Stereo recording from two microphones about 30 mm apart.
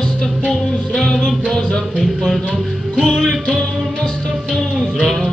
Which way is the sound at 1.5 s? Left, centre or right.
Left.